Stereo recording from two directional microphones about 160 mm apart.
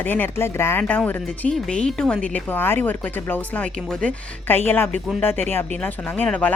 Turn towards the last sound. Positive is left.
turn(degrees=10)  # may be behind; listen again after turning